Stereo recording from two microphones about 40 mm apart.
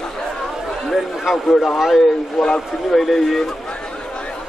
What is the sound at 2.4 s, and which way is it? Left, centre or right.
Speech, centre.